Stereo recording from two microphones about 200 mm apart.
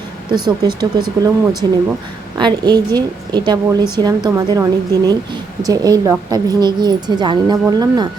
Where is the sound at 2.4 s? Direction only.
20° right (ahead or behind).